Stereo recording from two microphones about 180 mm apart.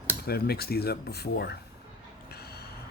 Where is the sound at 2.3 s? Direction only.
60° left (ahead or behind).